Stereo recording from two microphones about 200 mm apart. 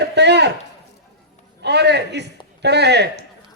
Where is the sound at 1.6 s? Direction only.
55° right (ahead or behind).